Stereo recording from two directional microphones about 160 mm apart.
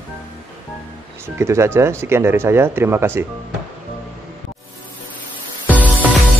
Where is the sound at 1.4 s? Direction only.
15° right (ahead or behind).